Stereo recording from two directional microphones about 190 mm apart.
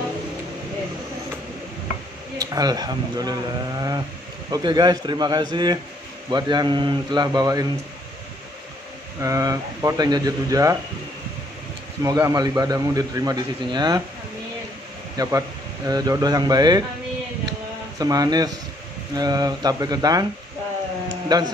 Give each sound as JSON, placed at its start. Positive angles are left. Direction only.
{"t": 2.3, "sound": "speech", "side_deg": -20}
{"t": 9.2, "sound": "speech", "side_deg": -15}
{"t": 12.0, "sound": "speech", "side_deg": -15}
{"t": 15.1, "sound": "speech", "side_deg": -20}
{"t": 17.5, "sound": "a sound", "side_deg": -20}
{"t": 19.1, "sound": "speech", "side_deg": -20}
{"t": 21.3, "sound": "speech", "side_deg": -20}